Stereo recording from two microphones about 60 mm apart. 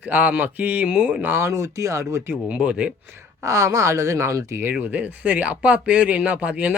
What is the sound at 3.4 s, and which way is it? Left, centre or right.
Speech, right.